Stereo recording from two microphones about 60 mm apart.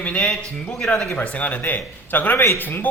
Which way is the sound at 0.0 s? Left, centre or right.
Centre.